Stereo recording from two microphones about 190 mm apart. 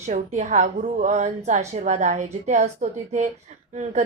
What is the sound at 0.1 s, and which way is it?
Speech, 40° right (ahead or behind).